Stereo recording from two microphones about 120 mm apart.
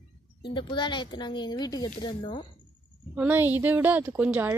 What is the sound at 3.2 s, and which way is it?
A woman's voice, 15° right (ahead or behind).